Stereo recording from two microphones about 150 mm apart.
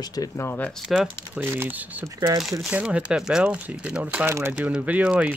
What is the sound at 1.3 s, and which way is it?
Speech, 15° right (ahead or behind).